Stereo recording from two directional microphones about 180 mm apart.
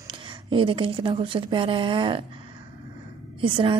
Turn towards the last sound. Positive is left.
turn(degrees=-30)  # may be behind; listen again after turning